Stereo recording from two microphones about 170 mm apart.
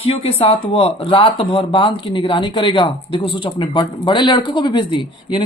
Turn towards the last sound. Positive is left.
turn(degrees=30)  # may be behind; listen again after turning